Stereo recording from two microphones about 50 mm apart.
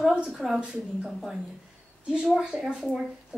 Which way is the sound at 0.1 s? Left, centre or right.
Right.